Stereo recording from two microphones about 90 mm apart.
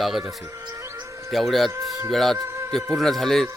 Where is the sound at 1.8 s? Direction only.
40° right (ahead or behind).